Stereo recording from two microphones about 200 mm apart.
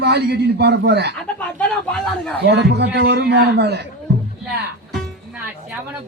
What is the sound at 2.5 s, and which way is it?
A man's voice, 55° right (ahead or behind).